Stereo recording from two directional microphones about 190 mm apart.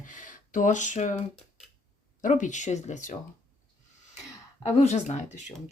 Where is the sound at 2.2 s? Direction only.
40° left (ahead or behind).